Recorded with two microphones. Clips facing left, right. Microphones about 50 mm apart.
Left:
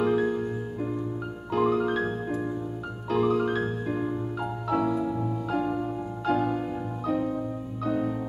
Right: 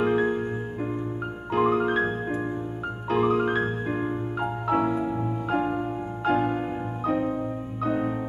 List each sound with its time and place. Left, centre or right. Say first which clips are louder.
0.0 s music: right 1 dB; right
1.5 s music: right 2 dB; right